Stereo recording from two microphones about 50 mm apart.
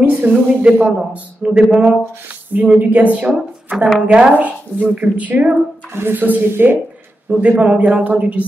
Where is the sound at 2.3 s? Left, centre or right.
Right.